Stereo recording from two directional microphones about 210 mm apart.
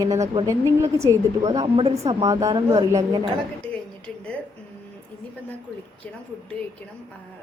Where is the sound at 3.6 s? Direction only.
5° left (ahead or behind).